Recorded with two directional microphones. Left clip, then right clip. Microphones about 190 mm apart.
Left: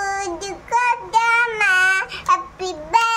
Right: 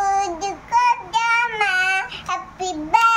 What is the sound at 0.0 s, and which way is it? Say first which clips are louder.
Child singing: right 4 dB; 35° left (ahead or behind).